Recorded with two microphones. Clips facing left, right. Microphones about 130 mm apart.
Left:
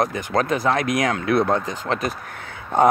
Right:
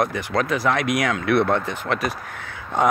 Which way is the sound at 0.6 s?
35° left (ahead or behind).